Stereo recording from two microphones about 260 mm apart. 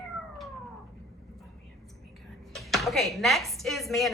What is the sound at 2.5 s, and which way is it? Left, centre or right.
Speech, centre.